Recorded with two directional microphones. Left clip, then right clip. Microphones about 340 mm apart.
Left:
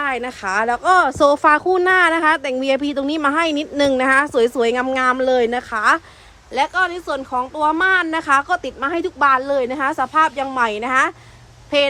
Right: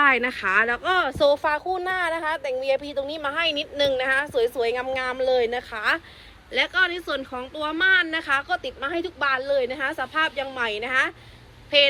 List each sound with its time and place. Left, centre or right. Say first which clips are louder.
0.0 s a woman's voice: right 2 dB; centre